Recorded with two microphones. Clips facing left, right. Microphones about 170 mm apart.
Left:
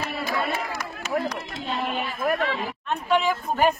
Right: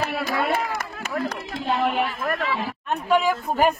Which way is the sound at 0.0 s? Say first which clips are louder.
Right 3 dB; 75° right (ahead or behind).